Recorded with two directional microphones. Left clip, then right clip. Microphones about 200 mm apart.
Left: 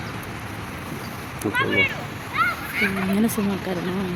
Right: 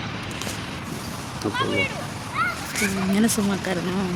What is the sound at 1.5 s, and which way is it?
Speech, 20° right (ahead or behind).